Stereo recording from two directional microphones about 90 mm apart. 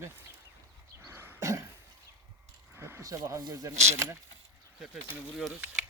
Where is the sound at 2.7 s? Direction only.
30° right (ahead or behind).